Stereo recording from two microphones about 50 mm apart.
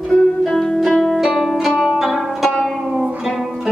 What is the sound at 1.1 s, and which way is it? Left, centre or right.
Music, centre.